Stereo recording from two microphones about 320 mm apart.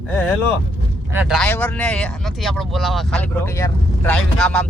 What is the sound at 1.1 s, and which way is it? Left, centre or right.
Speech, centre.